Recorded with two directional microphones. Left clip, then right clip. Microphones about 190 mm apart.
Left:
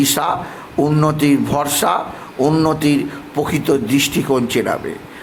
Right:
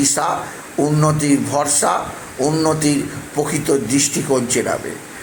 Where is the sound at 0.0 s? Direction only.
20° left (ahead or behind).